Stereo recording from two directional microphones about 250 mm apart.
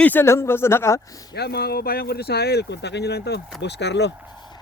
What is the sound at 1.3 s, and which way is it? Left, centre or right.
Speech, left.